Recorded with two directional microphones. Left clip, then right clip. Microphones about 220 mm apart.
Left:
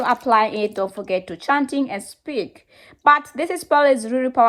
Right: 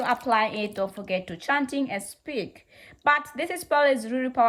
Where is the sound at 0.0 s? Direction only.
15° left (ahead or behind).